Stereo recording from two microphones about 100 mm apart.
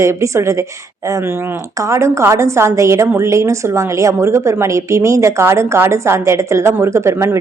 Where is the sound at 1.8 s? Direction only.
30° right (ahead or behind).